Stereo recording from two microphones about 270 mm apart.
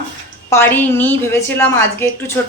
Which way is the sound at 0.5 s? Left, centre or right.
Centre.